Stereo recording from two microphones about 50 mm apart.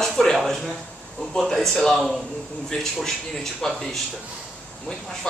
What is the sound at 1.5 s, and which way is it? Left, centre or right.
Speech, centre.